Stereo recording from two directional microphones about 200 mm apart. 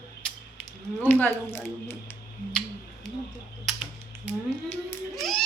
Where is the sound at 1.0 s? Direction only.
10° left (ahead or behind).